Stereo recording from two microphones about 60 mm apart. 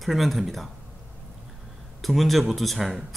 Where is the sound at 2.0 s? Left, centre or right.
Centre.